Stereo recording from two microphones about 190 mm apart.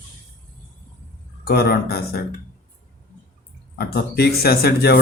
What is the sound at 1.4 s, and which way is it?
Speech, 55° left (ahead or behind).